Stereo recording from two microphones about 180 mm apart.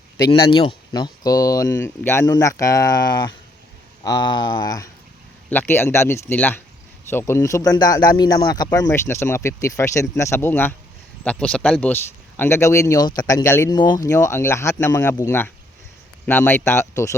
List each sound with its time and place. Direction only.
0.3 s speech: 25° left (ahead or behind)